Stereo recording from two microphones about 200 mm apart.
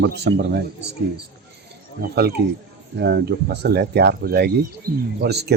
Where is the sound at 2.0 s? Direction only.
50° right (ahead or behind).